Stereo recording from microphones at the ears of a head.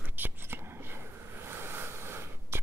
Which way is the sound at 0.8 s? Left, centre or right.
Right.